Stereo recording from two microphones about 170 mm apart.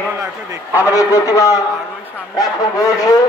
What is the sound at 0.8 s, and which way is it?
Speech, 20° left (ahead or behind).